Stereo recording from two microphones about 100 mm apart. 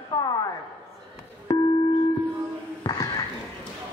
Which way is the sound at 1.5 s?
40° left (ahead or behind).